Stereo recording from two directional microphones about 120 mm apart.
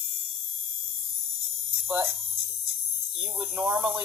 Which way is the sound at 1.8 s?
10° right (ahead or behind).